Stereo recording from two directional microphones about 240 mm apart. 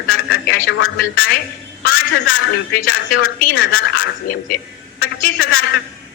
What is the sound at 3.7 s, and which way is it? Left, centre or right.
Speech, left.